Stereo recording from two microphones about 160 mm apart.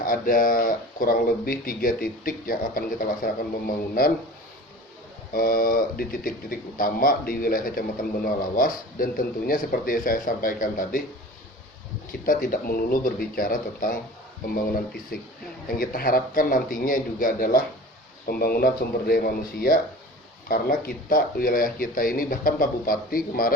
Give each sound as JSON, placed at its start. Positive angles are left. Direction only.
{"t": 0.0, "sound": "speech", "side_deg": 60}
{"t": 5.3, "sound": "speech", "side_deg": 65}
{"t": 12.2, "sound": "speech", "side_deg": 60}
{"t": 18.3, "sound": "speech", "side_deg": 70}